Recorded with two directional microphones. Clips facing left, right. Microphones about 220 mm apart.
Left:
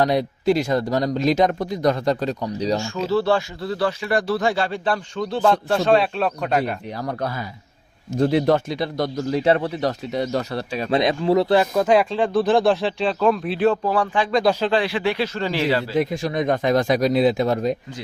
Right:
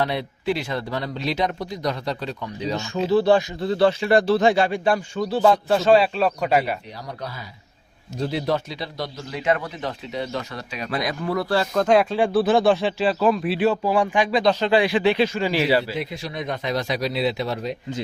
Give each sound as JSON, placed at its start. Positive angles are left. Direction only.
{"t": 0.0, "sound": "speech", "side_deg": 40}
{"t": 2.8, "sound": "speech", "side_deg": -15}
{"t": 6.9, "sound": "speech", "side_deg": 50}
{"t": 14.3, "sound": "speech", "side_deg": 5}
{"t": 14.7, "sound": "speech", "side_deg": -15}
{"t": 16.0, "sound": "speech", "side_deg": 45}